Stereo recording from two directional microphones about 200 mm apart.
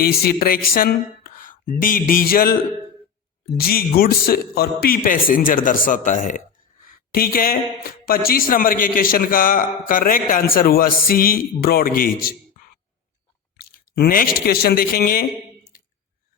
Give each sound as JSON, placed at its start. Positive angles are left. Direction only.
{"t": 0.0, "sound": "speech", "side_deg": 50}
{"t": 3.6, "sound": "speech", "side_deg": 50}
{"t": 13.6, "sound": "speech", "side_deg": 50}